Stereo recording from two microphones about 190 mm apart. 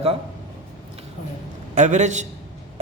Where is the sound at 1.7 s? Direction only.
40° right (ahead or behind).